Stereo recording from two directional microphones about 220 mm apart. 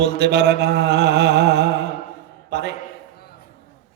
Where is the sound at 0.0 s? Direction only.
50° right (ahead or behind).